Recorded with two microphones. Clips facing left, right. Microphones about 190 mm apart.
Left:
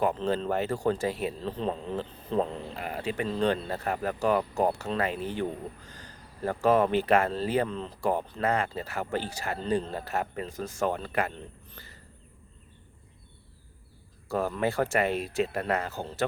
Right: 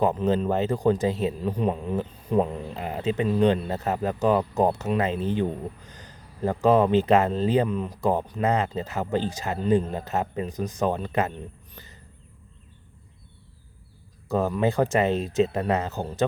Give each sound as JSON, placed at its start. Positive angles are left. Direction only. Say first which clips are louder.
{"t": 0.0, "sound": "speech", "louder": "right 4 dB", "side_deg": -20}
{"t": 14.3, "sound": "speech", "louder": "right 5 dB", "side_deg": -20}